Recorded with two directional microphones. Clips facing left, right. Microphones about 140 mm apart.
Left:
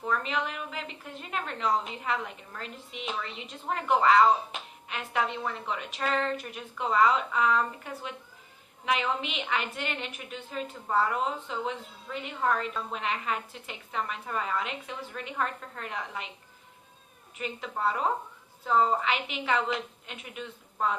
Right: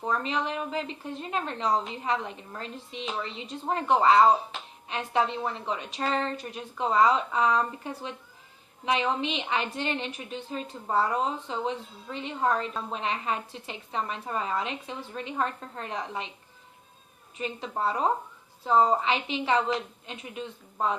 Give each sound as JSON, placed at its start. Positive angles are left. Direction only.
{"t": 0.0, "sound": "a woman's voice", "side_deg": -30}
{"t": 17.3, "sound": "a woman's voice", "side_deg": -30}